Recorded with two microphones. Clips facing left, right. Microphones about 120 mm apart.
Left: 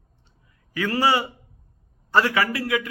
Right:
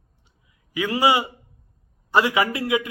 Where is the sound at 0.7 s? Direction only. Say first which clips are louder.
Right 1 dB; 15° right (ahead or behind).